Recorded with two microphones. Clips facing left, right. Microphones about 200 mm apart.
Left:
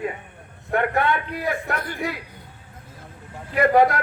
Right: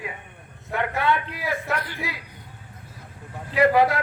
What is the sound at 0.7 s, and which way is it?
A man's voice, 55° left (ahead or behind).